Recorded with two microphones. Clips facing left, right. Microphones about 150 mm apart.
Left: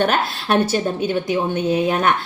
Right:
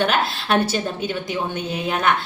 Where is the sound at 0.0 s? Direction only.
40° left (ahead or behind).